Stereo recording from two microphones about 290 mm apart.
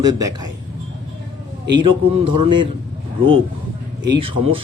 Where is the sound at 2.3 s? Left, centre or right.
Centre.